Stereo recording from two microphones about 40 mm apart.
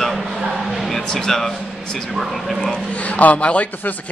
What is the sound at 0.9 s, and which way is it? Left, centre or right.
Speech, centre.